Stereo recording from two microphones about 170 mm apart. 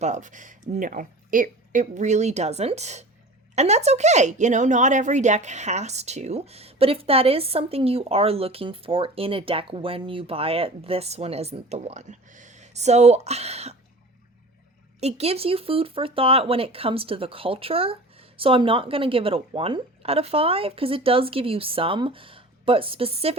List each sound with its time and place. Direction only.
0.0 s speech: 45° right (ahead or behind)
15.0 s speech: 35° right (ahead or behind)